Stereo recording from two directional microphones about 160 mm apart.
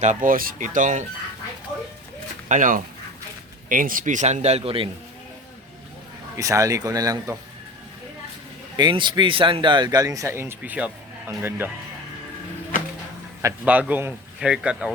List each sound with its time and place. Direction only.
0.0 s speech: 55° right (ahead or behind)
2.5 s a man's voice: 55° right (ahead or behind); by 4.9 s 35° right (ahead or behind)
6.3 s speech: 20° right (ahead or behind)
8.7 s speech: 30° right (ahead or behind); by 11.7 s 15° right (ahead or behind)
13.4 s a man's voice: 10° right (ahead or behind)